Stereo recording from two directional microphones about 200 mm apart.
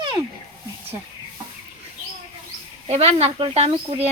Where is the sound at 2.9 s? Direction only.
30° right (ahead or behind).